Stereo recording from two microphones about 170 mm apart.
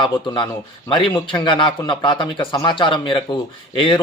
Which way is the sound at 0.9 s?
30° left (ahead or behind).